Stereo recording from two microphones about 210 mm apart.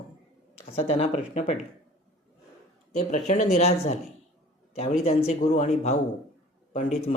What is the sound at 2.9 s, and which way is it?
Speech, 35° left (ahead or behind).